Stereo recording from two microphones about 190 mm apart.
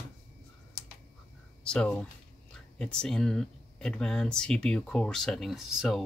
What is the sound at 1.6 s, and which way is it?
Speech, 5° left (ahead or behind).